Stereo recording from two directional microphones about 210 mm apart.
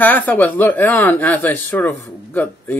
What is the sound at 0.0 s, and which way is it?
Speech, 10° left (ahead or behind).